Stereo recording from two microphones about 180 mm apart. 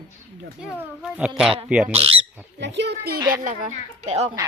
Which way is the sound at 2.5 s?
75° right (ahead or behind).